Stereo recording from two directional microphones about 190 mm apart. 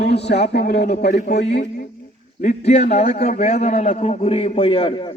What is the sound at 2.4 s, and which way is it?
A man's voice, 35° left (ahead or behind).